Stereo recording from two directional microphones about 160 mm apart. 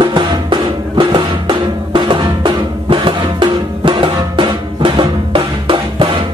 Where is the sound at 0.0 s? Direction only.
30° right (ahead or behind).